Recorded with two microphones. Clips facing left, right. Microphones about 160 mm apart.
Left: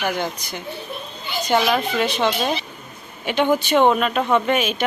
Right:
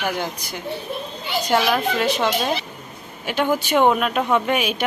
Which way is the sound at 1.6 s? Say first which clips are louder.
Even; centre (ahead or behind).